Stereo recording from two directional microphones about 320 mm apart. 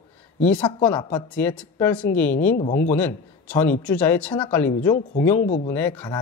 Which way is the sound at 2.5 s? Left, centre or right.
Left.